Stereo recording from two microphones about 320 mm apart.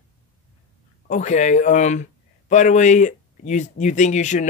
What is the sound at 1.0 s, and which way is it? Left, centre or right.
Speech, left.